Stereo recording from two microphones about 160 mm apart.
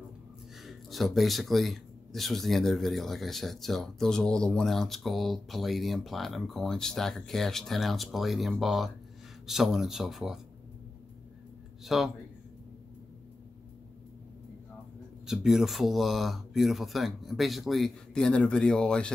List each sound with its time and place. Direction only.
0.6 s speech: centre (ahead or behind)
11.8 s speech: centre (ahead or behind)
15.2 s speech: centre (ahead or behind)